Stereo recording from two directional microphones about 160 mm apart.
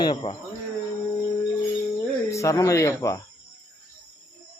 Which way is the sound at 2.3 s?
20° left (ahead or behind).